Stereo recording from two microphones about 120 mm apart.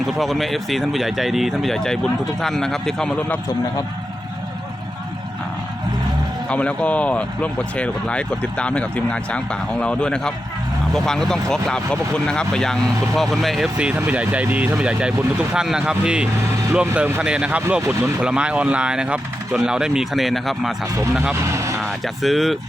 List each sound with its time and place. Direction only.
0.2 s speech: centre (ahead or behind)
6.5 s speech: 10° left (ahead or behind)
21.4 s vehicle: 25° right (ahead or behind)
21.8 s speech: centre (ahead or behind)